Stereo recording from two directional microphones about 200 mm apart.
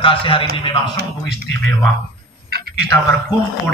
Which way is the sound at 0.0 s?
25° left (ahead or behind).